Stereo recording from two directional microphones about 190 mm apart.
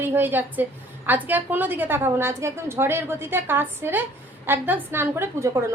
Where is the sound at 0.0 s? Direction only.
10° right (ahead or behind).